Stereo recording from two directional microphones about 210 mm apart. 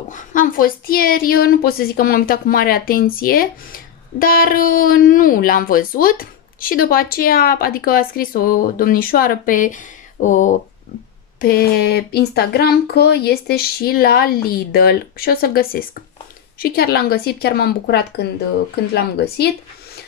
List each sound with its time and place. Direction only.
0.1 s a woman's voice: 40° left (ahead or behind)
11.4 s a woman's voice: 45° left (ahead or behind)